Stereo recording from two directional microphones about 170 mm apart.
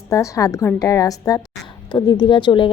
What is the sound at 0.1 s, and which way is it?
A woman's voice, 20° left (ahead or behind).